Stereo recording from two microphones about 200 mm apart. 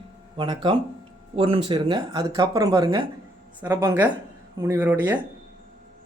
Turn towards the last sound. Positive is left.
turn(degrees=-10)  # may be behind; listen again after turning